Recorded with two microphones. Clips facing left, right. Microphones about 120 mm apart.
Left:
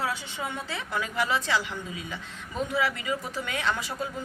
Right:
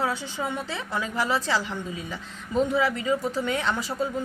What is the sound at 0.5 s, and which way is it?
A woman's voice, 25° right (ahead or behind).